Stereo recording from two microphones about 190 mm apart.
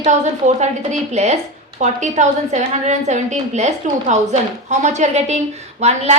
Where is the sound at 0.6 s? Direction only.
35° right (ahead or behind).